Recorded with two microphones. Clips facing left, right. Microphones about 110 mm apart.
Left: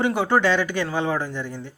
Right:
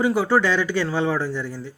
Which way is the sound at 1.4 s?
55° left (ahead or behind).